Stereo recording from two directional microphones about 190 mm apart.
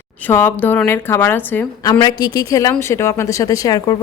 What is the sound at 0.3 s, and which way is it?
A woman's voice, 10° left (ahead or behind).